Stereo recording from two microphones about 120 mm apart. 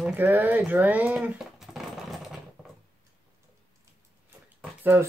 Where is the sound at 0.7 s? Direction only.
15° right (ahead or behind).